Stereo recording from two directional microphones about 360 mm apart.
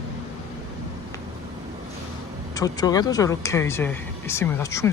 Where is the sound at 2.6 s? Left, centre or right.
Centre.